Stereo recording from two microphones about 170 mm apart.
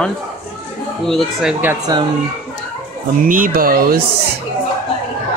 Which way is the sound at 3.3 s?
55° right (ahead or behind).